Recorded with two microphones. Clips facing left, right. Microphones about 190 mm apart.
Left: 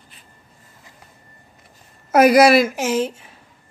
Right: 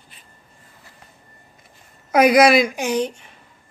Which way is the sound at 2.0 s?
5° left (ahead or behind).